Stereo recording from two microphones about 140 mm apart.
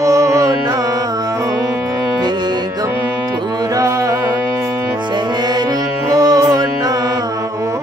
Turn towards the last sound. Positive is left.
turn(degrees=-25)  # may be behind; listen again after turning